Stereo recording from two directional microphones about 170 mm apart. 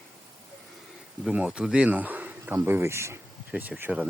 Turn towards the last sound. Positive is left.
turn(degrees=-10)  # may be behind; listen again after turning